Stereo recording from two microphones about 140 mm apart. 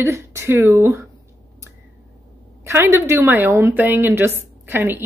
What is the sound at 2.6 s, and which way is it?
Speech, 15° right (ahead or behind).